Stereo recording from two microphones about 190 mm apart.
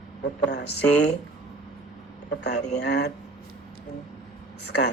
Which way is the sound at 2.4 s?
65° left (ahead or behind).